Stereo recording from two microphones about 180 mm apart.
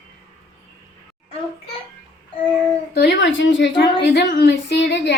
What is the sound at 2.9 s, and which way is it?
A woman's voice, 75° left (ahead or behind).